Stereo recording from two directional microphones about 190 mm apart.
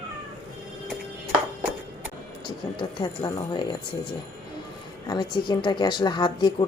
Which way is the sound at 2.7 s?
25° left (ahead or behind).